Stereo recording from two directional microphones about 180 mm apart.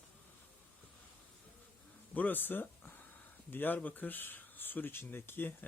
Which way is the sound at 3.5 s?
10° left (ahead or behind).